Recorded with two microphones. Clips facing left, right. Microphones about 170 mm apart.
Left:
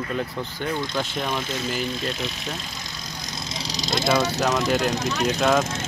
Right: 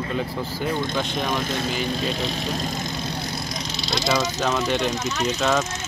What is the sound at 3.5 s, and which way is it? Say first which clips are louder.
Vehicle: left 5 dB; 35° left (ahead or behind).